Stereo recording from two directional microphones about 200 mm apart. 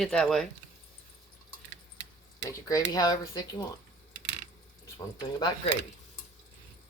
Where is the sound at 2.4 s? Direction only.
20° left (ahead or behind).